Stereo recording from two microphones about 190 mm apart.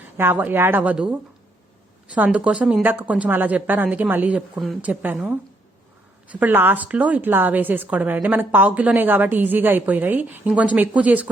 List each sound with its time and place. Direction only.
0.2 s a woman's voice: 10° right (ahead or behind)
2.1 s a woman's voice: 10° right (ahead or behind)
6.4 s a woman's voice: 10° right (ahead or behind)